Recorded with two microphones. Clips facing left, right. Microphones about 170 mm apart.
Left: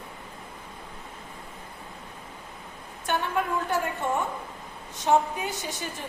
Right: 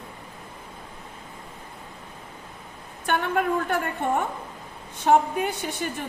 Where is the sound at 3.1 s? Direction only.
60° right (ahead or behind).